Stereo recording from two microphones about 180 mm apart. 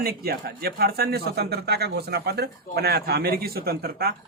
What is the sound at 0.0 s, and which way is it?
Speech, 60° right (ahead or behind).